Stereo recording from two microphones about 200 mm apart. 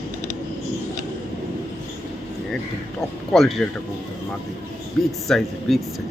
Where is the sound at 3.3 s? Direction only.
Centre (ahead or behind).